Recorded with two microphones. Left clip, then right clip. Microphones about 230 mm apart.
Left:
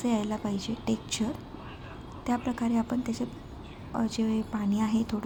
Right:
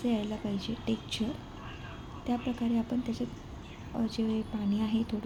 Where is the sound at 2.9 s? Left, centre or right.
Centre.